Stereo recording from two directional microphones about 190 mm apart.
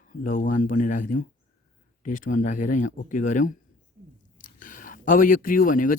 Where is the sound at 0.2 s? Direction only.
45° left (ahead or behind).